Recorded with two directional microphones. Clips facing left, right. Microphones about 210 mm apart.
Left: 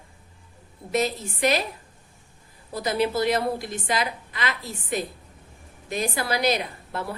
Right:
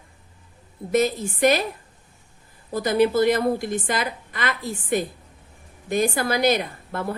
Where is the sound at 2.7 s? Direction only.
50° right (ahead or behind).